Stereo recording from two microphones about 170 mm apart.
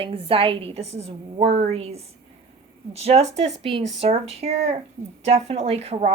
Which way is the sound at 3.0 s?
40° right (ahead or behind).